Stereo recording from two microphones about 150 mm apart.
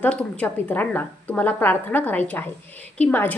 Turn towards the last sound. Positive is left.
turn(degrees=10)  # may be behind; listen again after turning